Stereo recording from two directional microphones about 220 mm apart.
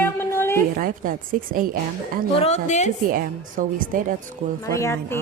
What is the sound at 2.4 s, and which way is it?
Speech, 30° left (ahead or behind).